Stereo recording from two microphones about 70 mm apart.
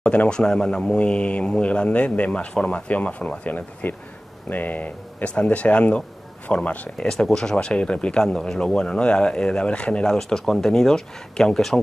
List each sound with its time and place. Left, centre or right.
0.0 s speech: centre
7.2 s speech: centre